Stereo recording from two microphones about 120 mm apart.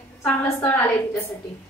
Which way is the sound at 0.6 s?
15° left (ahead or behind).